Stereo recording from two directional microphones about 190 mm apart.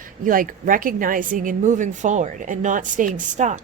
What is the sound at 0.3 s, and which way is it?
A woman's voice, 45° right (ahead or behind).